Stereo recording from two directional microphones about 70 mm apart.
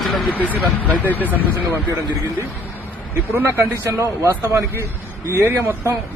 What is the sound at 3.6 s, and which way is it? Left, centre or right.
A man's voice, right.